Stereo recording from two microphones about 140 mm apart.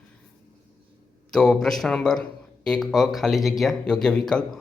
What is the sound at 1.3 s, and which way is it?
Speech, 5° left (ahead or behind).